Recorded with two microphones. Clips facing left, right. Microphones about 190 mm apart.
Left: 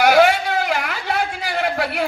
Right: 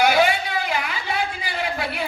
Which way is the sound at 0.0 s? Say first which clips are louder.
Left 4 dB; 75° left (ahead or behind).